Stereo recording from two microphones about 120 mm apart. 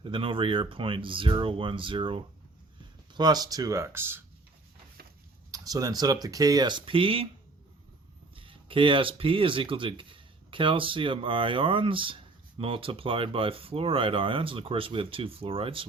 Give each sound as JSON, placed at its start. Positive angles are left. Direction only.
{"t": 0.0, "sound": "speech", "side_deg": -45}
{"t": 3.2, "sound": "speech", "side_deg": -35}
{"t": 5.5, "sound": "speech", "side_deg": -30}
{"t": 8.4, "sound": "speech", "side_deg": -45}